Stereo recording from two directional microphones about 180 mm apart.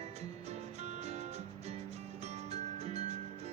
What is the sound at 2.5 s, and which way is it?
Music, 35° right (ahead or behind).